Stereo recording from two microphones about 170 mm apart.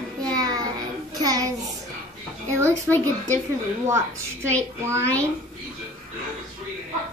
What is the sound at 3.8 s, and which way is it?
Speech, 15° right (ahead or behind).